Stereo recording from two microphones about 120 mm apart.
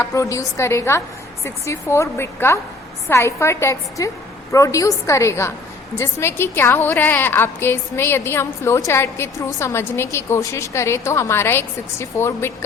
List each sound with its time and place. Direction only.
0.0 s a woman's voice: 25° left (ahead or behind)